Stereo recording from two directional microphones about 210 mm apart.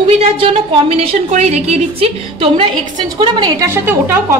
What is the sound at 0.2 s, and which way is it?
A woman's voice, 25° right (ahead or behind).